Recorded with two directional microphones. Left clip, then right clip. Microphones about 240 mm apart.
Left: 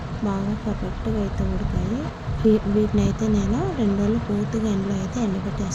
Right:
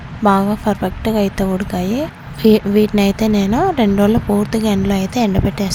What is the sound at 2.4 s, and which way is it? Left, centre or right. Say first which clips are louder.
Speech: right 8 dB; right.